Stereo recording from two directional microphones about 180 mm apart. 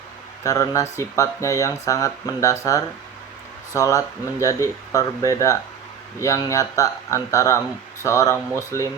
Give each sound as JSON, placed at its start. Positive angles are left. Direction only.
{"t": 0.4, "sound": "speech", "side_deg": 20}